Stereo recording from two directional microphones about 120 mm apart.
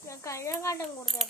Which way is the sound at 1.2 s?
Centre (ahead or behind).